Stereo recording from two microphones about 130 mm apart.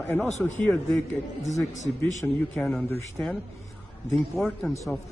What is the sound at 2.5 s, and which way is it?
Speech, 5° left (ahead or behind).